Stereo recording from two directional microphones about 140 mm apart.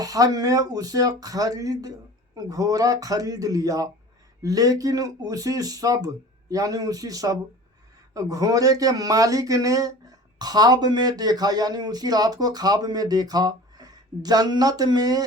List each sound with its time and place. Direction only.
0.0 s speech: 25° right (ahead or behind)